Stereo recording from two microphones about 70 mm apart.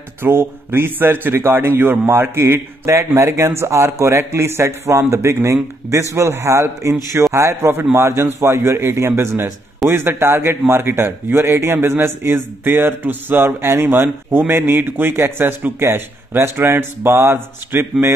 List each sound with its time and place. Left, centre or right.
0.2 s a man's voice: right